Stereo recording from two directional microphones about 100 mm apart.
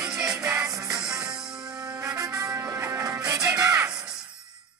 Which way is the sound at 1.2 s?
5° right (ahead or behind).